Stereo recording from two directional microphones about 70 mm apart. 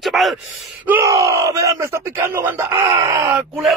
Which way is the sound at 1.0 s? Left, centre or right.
Right.